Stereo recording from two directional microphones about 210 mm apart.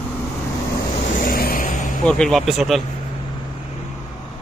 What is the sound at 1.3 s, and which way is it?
Vehicle, 45° left (ahead or behind).